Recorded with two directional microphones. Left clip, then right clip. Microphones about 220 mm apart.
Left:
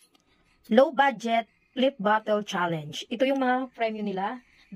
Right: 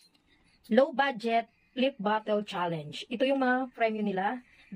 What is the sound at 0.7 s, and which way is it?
Speech, 10° left (ahead or behind).